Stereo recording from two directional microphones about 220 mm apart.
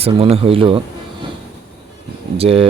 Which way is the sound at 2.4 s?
25° right (ahead or behind).